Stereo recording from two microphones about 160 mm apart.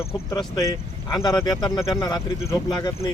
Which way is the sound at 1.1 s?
25° left (ahead or behind).